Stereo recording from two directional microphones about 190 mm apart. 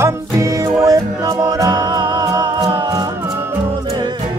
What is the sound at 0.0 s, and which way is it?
Music, 15° right (ahead or behind).